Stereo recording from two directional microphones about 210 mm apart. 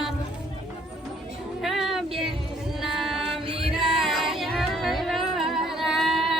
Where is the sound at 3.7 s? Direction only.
Centre (ahead or behind).